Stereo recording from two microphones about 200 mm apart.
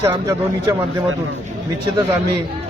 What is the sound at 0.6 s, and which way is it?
Speech, 20° right (ahead or behind).